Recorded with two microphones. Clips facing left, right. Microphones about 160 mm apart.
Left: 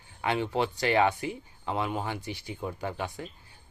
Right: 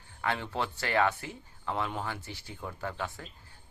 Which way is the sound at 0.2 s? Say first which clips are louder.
Left 5 dB; 20° left (ahead or behind).